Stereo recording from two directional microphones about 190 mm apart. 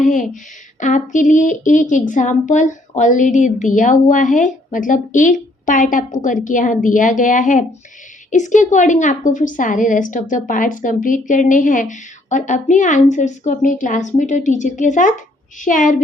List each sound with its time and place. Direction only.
0.0 s a woman's voice: 40° left (ahead or behind)